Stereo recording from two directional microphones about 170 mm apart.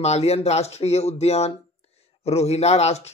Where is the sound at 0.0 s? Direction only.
40° left (ahead or behind).